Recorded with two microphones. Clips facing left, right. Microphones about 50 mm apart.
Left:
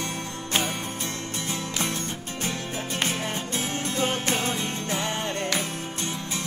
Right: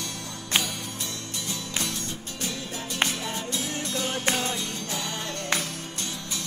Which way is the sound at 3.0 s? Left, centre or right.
Left.